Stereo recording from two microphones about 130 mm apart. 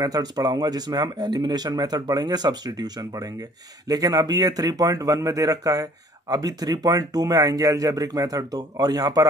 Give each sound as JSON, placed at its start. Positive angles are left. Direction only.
{"t": 0.0, "sound": "speech", "side_deg": -30}